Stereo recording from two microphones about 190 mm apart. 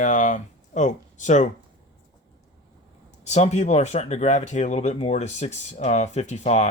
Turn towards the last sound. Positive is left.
turn(degrees=35)  # may be behind; listen again after turning